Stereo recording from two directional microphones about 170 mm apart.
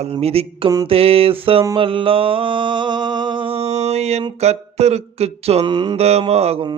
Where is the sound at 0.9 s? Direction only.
35° right (ahead or behind).